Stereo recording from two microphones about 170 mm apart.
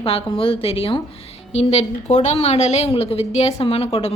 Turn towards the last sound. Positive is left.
turn(degrees=35)  # may be behind; listen again after turning